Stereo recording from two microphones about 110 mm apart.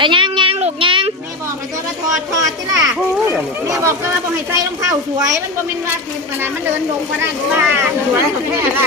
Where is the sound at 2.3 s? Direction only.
35° right (ahead or behind).